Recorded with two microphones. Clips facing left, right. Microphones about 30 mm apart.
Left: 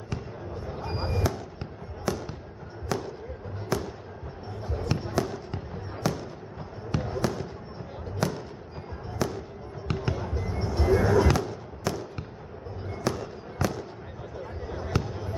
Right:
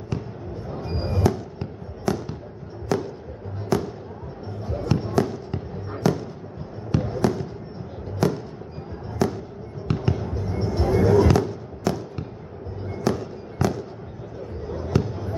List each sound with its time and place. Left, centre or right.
0.7 s fireworks: centre
8.2 s music: centre
9.2 s fireworks: centre
12.9 s fireworks: centre
14.8 s basketball bounce: centre